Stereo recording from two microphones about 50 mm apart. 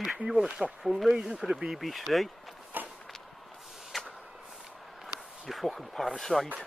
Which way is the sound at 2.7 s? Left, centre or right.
Right.